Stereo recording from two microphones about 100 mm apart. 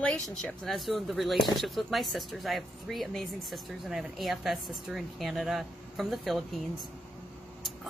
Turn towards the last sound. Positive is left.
turn(degrees=0)  # may be behind; listen again after turning